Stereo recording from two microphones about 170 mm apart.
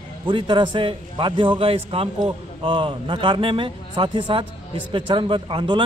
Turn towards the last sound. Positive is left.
turn(degrees=-30)  # may be behind; listen again after turning